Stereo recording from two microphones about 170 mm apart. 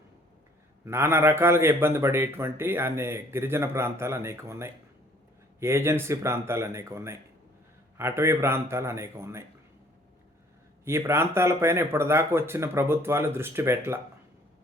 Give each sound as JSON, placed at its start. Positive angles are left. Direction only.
{"t": 0.9, "sound": "a man's voice", "side_deg": -15}
{"t": 10.8, "sound": "a man's voice", "side_deg": -15}